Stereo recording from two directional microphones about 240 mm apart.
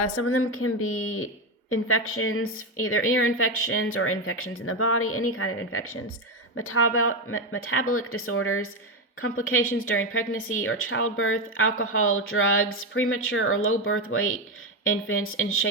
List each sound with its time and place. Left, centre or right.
0.0 s speech: left